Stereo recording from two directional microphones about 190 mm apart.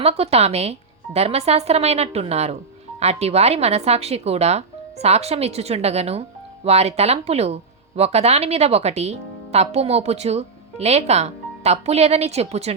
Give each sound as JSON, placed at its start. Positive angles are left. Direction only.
{"t": 0.0, "sound": "speech", "side_deg": -30}